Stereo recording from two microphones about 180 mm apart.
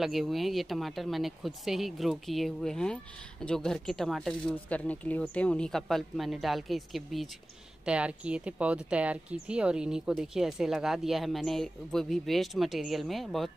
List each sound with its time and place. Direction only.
0.0 s speech: centre (ahead or behind)